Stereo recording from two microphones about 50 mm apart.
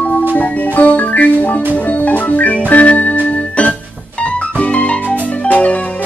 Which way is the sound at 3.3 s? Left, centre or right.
Left.